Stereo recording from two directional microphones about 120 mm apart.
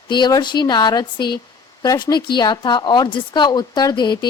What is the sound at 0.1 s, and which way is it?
Speech, 35° left (ahead or behind).